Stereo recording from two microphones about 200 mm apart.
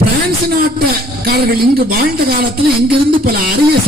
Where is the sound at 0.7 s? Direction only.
50° right (ahead or behind).